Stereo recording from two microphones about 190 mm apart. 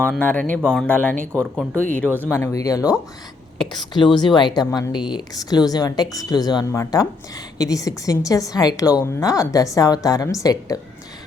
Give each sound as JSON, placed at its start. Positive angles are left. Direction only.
{"t": 0.0, "sound": "a woman's voice", "side_deg": 5}